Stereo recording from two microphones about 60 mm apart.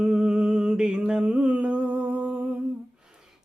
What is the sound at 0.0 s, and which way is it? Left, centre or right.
Humming, centre.